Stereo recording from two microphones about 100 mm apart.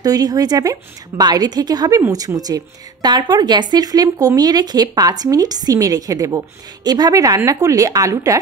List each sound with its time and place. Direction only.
0.0 s a woman's voice: 40° right (ahead or behind)